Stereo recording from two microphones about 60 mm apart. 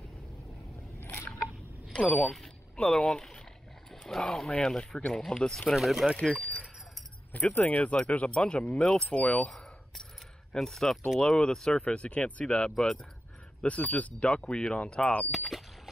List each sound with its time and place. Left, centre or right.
2.0 s speech: left
2.2 s speech: centre
3.9 s a sound: centre
4.3 s speech: centre
5.8 s speech: centre
7.5 s speech: left
10.5 s speech: centre
15.3 s a sound: centre